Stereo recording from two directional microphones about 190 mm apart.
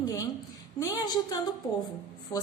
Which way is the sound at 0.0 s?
20° left (ahead or behind).